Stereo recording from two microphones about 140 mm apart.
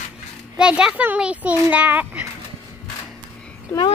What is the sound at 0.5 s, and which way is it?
A child's voice, 5° right (ahead or behind).